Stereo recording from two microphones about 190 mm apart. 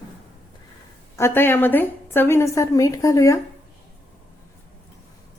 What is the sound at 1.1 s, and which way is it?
A woman's voice, 10° left (ahead or behind).